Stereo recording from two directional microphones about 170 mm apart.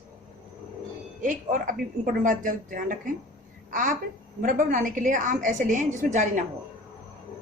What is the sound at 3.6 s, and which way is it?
Babbling, 50° right (ahead or behind).